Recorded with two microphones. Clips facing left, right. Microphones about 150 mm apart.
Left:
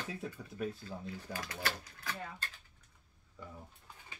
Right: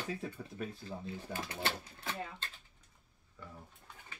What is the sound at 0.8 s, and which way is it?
Speech, 25° right (ahead or behind).